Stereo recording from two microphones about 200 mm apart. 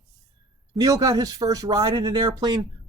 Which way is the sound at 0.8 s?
15° right (ahead or behind).